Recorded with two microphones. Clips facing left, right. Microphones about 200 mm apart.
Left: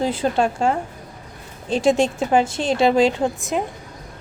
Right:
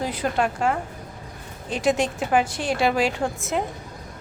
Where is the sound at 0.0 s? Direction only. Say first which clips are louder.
Left 4 dB; 25° left (ahead or behind).